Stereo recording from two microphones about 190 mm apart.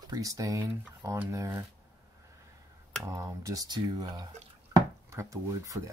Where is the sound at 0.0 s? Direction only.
20° right (ahead or behind).